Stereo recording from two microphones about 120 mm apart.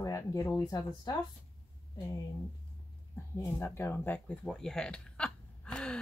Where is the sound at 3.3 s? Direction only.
20° left (ahead or behind).